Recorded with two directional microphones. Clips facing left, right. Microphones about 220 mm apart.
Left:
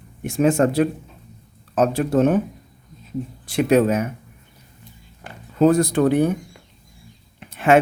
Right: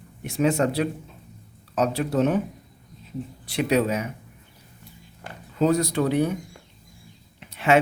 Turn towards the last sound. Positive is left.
turn(degrees=50)  # may be behind; listen again after turning